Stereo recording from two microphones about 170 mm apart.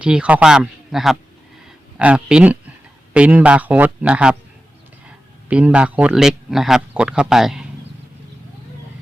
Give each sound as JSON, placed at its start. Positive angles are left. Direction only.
{"t": 0.0, "sound": "speech", "side_deg": -5}
{"t": 5.5, "sound": "speech", "side_deg": -5}